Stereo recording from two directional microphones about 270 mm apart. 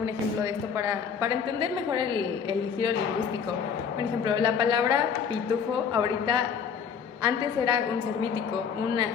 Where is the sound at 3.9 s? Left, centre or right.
Centre.